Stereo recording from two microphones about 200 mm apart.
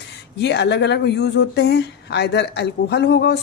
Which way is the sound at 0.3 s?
55° left (ahead or behind).